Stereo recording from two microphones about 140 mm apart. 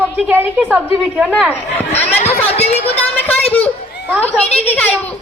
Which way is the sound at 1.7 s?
15° left (ahead or behind).